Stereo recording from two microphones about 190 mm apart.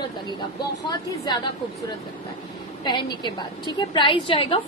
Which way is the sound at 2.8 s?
25° left (ahead or behind).